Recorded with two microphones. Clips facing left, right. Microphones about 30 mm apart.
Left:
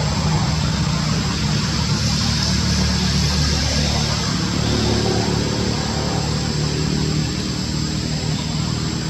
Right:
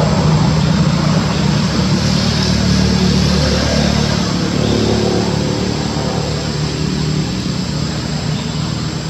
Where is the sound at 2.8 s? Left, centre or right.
Right.